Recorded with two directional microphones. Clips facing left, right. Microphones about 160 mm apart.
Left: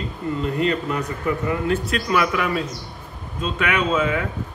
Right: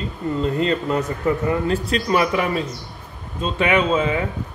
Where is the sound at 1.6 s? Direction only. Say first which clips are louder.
Right 1 dB; 30° right (ahead or behind).